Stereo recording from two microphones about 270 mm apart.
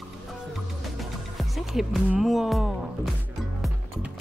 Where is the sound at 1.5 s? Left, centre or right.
Centre.